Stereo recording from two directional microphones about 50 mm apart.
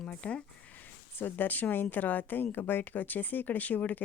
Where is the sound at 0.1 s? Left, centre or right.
Left.